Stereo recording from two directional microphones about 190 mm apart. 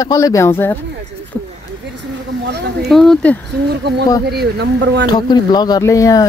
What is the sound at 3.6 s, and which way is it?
Speech, 60° right (ahead or behind).